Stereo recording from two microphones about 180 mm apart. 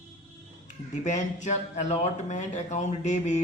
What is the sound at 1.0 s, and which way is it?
Speech, 40° left (ahead or behind).